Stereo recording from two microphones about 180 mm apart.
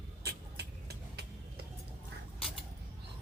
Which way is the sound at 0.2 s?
65° right (ahead or behind).